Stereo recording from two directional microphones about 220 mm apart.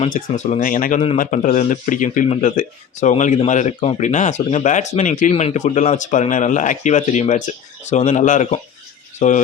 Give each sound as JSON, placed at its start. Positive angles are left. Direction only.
{"t": 0.0, "sound": "speech", "side_deg": 30}